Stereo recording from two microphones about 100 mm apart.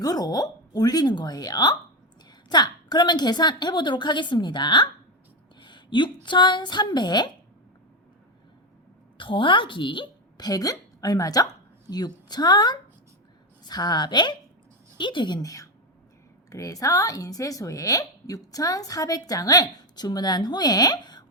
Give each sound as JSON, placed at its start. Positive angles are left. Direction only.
{"t": 0.0, "sound": "a woman's voice", "side_deg": 40}
{"t": 5.5, "sound": "a sound", "side_deg": 50}
{"t": 6.2, "sound": "a woman's voice", "side_deg": 50}
{"t": 9.1, "sound": "a woman's voice", "side_deg": 55}